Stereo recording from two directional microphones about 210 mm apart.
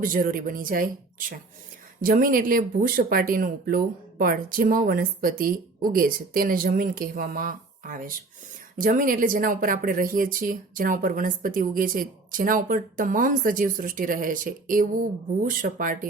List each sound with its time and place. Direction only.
0.0 s speech: 40° right (ahead or behind)
2.0 s speech: 40° right (ahead or behind)